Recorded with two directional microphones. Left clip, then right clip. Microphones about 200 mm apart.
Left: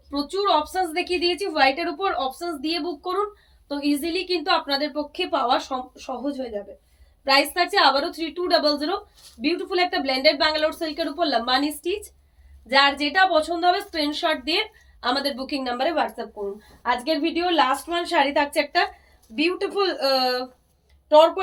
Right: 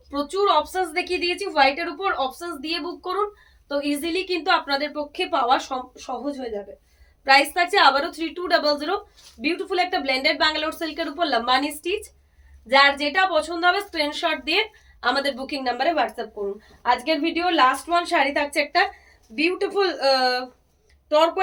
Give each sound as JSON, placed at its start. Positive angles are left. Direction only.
{"t": 0.1, "sound": "a woman's voice", "side_deg": -15}